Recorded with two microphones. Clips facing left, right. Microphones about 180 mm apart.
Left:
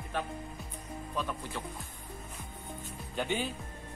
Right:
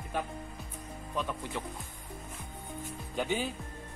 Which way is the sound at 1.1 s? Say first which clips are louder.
Right 2 dB; 15° right (ahead or behind).